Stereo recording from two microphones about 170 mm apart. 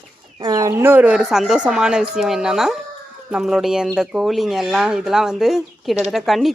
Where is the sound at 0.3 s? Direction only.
25° right (ahead or behind).